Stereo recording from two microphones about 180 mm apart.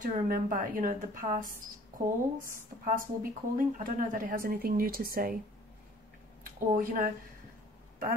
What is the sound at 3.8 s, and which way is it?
A woman's voice, 50° right (ahead or behind).